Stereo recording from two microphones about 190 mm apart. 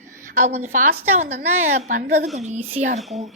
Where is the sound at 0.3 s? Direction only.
35° right (ahead or behind).